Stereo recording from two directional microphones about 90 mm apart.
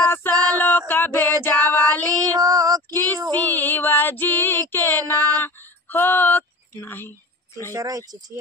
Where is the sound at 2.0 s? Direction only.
45° right (ahead or behind).